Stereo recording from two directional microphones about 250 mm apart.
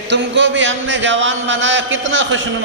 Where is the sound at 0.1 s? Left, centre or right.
Right.